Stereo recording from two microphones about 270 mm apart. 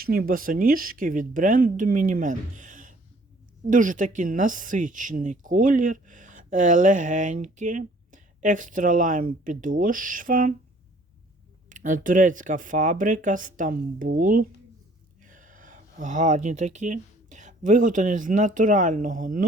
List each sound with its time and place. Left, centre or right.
0.0 s speech: right
11.7 s speech: right